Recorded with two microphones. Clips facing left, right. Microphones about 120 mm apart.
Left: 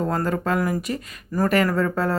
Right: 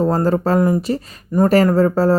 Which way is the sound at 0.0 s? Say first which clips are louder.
Right 7 dB; 30° right (ahead or behind).